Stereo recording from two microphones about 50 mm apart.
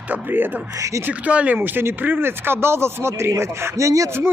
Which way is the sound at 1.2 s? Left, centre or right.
Right.